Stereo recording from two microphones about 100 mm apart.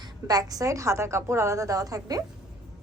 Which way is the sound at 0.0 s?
40° right (ahead or behind).